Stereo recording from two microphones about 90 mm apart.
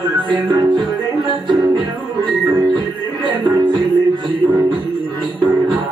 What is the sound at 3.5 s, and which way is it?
Music, 55° right (ahead or behind).